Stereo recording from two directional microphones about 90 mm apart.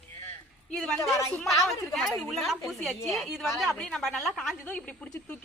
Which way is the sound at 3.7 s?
10° left (ahead or behind).